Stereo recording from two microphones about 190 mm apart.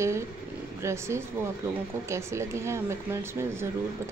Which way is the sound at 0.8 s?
15° right (ahead or behind).